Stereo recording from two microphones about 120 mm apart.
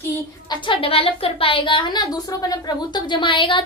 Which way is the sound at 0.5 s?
45° left (ahead or behind).